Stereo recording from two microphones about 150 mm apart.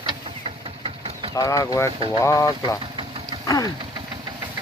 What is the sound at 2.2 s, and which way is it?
Speech, 20° left (ahead or behind).